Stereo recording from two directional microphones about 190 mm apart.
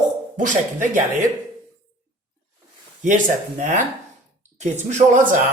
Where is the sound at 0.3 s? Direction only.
40° right (ahead or behind).